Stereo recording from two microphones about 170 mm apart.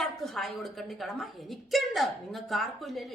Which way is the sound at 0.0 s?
Centre (ahead or behind).